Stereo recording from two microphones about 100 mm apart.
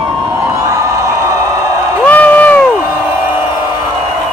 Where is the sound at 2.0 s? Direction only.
15° left (ahead or behind).